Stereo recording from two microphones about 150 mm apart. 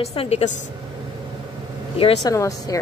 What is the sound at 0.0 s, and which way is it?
Speech, 40° left (ahead or behind).